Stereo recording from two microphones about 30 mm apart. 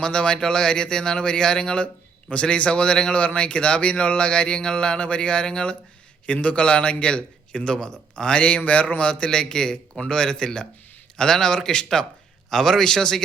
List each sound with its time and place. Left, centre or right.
0.0 s speech: left
3.1 s speech: left
6.2 s speech: left
7.5 s speech: left
12.5 s a man's voice: centre